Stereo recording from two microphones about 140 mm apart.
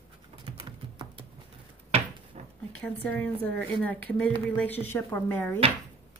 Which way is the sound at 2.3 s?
55° right (ahead or behind).